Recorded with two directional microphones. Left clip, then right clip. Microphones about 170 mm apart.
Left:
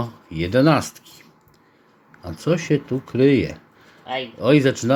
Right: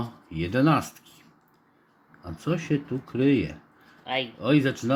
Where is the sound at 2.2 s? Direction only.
25° left (ahead or behind).